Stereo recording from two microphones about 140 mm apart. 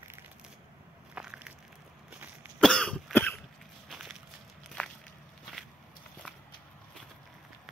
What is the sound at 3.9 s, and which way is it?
Walk, 5° right (ahead or behind).